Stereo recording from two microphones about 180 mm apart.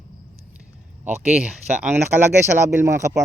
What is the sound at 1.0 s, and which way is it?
Speech, 5° right (ahead or behind).